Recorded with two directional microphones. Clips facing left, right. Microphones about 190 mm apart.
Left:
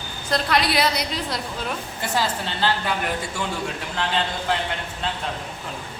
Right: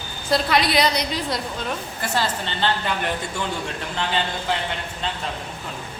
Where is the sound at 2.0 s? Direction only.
20° left (ahead or behind).